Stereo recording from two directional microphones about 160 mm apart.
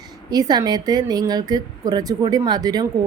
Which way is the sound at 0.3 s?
25° right (ahead or behind).